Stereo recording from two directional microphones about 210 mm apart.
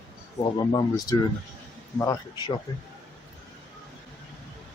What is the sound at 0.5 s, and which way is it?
Speech, 20° left (ahead or behind).